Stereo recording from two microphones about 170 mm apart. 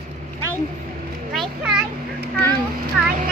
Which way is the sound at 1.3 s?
Centre (ahead or behind).